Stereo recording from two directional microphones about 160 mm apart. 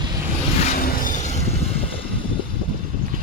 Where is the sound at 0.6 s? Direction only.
55° left (ahead or behind).